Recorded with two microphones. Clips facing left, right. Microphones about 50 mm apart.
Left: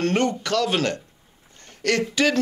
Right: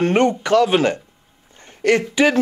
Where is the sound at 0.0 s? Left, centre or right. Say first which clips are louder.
Right 5 dB; centre.